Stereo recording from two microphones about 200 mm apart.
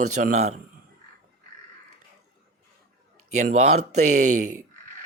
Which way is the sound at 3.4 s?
35° right (ahead or behind).